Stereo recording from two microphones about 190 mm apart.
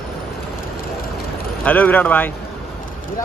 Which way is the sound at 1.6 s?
10° left (ahead or behind).